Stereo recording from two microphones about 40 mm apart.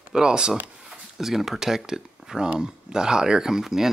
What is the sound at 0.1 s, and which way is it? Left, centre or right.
Speech, right.